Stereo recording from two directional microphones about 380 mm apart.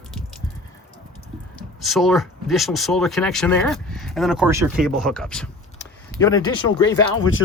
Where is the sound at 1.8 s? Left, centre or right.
Centre.